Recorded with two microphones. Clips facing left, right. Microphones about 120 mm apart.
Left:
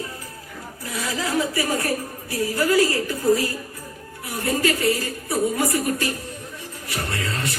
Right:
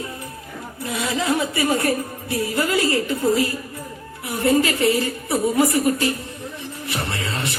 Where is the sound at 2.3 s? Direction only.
25° right (ahead or behind).